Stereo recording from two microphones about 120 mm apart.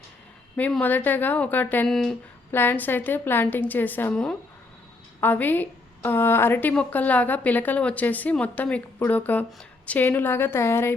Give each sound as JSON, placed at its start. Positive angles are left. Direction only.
{"t": 0.8, "sound": "a woman's voice", "side_deg": 15}
{"t": 1.9, "sound": "speech", "side_deg": 0}
{"t": 2.5, "sound": "a woman's voice", "side_deg": 15}